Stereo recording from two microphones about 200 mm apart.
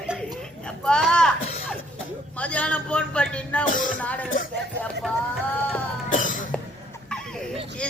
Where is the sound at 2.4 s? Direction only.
5° left (ahead or behind).